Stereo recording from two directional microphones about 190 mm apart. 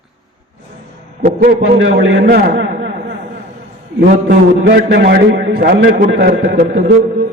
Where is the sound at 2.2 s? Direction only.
50° right (ahead or behind).